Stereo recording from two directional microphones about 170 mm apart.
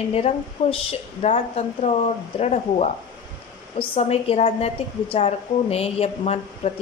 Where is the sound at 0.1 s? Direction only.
35° left (ahead or behind).